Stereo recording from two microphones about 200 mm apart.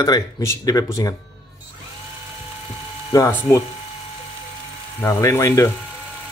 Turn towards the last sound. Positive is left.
turn(degrees=15)  # may be behind; listen again after turning